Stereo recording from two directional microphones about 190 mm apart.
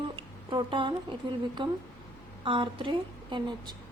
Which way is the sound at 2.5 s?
25° right (ahead or behind).